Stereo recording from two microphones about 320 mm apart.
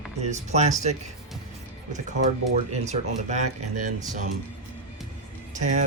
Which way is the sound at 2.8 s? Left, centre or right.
Right.